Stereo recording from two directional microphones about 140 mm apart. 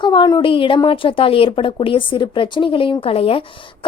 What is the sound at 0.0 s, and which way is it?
A woman's voice, 35° left (ahead or behind).